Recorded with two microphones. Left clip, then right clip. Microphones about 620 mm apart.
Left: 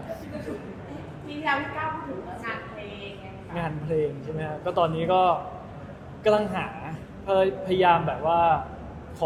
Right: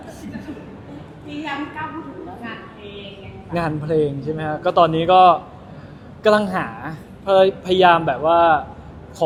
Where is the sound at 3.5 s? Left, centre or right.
Right.